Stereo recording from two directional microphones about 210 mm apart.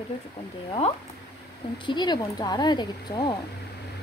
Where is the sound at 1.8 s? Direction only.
20° left (ahead or behind).